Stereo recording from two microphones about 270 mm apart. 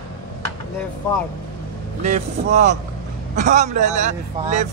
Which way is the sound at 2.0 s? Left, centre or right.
Right.